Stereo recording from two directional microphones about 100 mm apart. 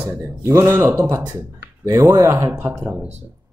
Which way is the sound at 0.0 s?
25° right (ahead or behind).